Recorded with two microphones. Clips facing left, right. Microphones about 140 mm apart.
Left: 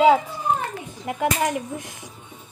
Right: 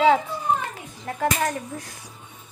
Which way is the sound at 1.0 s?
15° left (ahead or behind).